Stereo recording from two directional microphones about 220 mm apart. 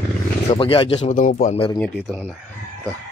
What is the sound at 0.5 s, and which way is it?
Speech, 25° left (ahead or behind).